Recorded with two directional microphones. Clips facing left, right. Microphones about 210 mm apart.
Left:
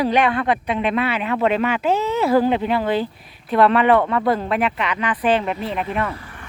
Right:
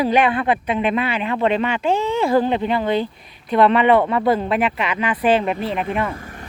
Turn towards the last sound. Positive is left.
turn(degrees=-45)  # may be behind; listen again after turning